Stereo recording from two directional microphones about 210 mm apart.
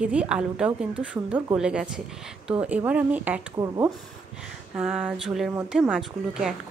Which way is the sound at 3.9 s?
5° right (ahead or behind).